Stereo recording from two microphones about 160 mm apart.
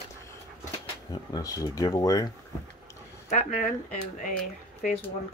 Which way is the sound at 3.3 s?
50° left (ahead or behind).